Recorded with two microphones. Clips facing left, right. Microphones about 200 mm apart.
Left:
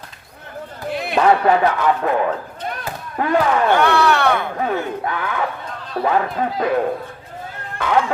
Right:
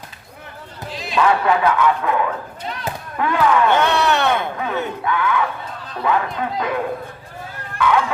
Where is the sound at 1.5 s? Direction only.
40° left (ahead or behind).